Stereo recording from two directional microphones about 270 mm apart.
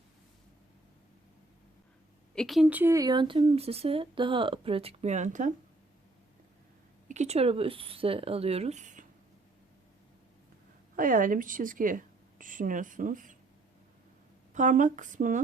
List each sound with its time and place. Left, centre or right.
2.3 s speech: centre; by 5.5 s right
7.1 s speech: right
10.9 s speech: right
14.5 s speech: right